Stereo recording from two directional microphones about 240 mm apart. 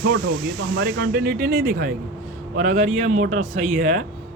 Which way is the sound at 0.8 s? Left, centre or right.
Right.